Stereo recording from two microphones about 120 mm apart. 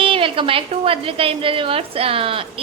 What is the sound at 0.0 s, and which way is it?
A woman's voice, 45° right (ahead or behind).